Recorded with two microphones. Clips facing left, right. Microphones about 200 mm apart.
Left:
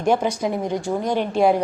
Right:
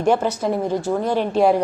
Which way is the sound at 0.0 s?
10° left (ahead or behind).